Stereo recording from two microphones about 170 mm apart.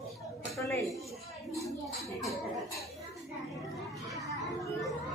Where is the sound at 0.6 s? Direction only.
15° left (ahead or behind).